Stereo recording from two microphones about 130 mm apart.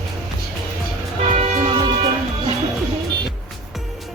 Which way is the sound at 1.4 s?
50° right (ahead or behind).